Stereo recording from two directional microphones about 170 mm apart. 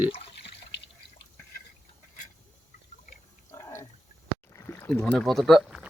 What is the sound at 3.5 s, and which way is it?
Water, 20° left (ahead or behind).